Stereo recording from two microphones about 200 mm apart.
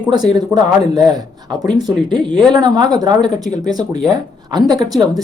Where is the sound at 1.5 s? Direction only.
20° right (ahead or behind).